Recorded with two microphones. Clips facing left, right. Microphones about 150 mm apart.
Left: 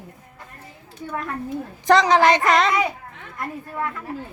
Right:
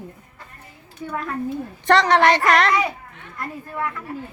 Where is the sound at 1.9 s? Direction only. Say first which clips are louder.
Left 1 dB; 10° left (ahead or behind).